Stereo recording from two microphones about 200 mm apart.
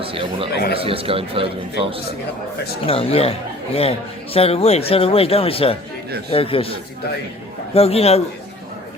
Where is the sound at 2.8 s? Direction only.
30° left (ahead or behind).